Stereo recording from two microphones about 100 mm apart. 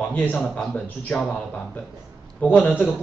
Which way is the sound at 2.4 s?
15° left (ahead or behind).